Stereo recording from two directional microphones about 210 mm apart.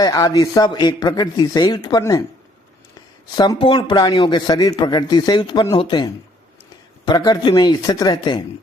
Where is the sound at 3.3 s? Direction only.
20° left (ahead or behind).